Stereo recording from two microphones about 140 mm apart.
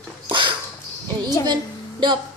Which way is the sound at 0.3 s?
35° right (ahead or behind).